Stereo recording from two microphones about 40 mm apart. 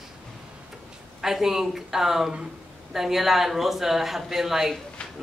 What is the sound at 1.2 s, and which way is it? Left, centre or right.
Speech, centre.